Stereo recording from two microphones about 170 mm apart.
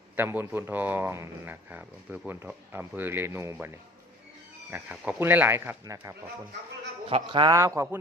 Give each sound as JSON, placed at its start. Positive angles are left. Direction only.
{"t": 0.2, "sound": "speech", "side_deg": -10}
{"t": 4.7, "sound": "speech", "side_deg": -10}
{"t": 7.1, "sound": "a man's voice", "side_deg": -30}